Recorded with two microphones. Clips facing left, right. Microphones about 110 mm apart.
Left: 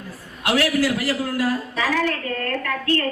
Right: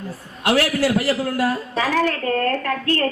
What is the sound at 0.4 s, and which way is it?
A man's voice, 30° right (ahead or behind).